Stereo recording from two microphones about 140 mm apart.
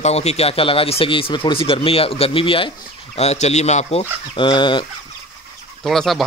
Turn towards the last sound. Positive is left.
turn(degrees=0)  # may be behind; listen again after turning